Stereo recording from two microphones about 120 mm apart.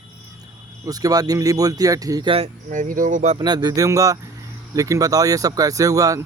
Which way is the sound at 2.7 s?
90° right.